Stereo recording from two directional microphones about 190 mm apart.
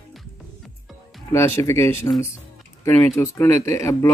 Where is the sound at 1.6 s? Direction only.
15° left (ahead or behind).